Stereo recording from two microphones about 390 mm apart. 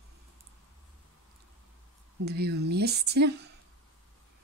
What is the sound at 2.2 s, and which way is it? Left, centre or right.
A woman's voice, right.